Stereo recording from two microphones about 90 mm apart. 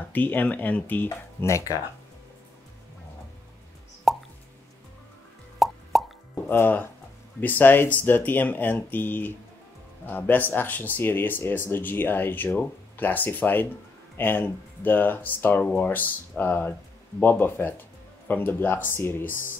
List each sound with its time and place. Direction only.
0.1 s speech: 20° left (ahead or behind)
1.0 s speech: 35° left (ahead or behind)
4.1 s plop: centre (ahead or behind)
5.6 s plop: centre (ahead or behind)
6.5 s speech: 25° left (ahead or behind)